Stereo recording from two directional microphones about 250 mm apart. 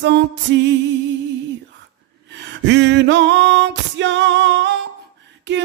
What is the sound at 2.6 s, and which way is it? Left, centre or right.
Music, right.